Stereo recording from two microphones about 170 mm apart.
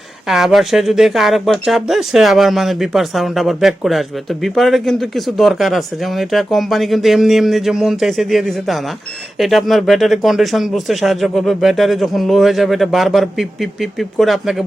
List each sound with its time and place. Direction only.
0.3 s speech: centre (ahead or behind)